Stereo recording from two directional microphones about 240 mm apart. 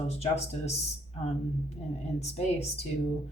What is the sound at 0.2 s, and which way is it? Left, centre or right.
Speech, left.